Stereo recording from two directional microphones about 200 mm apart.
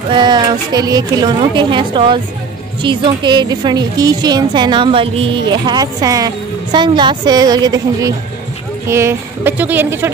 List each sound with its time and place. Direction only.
0.1 s a woman's voice: 20° right (ahead or behind)